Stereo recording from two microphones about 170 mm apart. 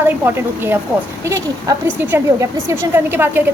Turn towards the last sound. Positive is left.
turn(degrees=-10)  # may be behind; listen again after turning